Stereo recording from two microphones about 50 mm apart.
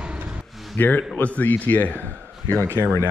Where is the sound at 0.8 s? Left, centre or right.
Left.